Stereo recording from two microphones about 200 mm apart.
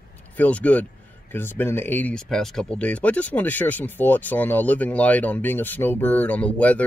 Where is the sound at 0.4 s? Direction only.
5° left (ahead or behind).